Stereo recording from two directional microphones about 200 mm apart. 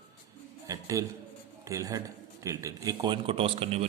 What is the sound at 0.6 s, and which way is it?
A man's voice, 15° right (ahead or behind).